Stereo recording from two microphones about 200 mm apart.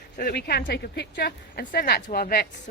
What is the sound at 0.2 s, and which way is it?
Speech, 50° left (ahead or behind).